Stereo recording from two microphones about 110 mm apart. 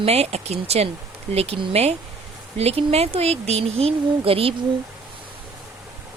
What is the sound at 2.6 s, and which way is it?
Speech, 70° right (ahead or behind).